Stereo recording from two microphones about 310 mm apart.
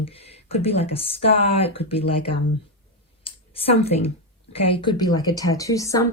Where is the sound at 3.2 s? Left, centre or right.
Centre.